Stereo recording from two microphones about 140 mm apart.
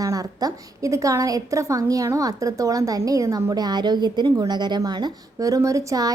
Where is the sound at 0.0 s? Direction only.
25° right (ahead or behind).